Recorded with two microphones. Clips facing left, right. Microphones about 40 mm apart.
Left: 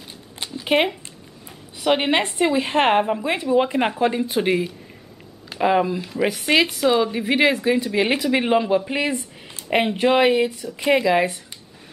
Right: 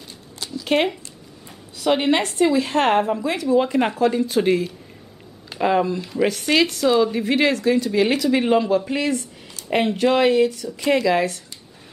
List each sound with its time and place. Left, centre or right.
0.7 s a woman's voice: centre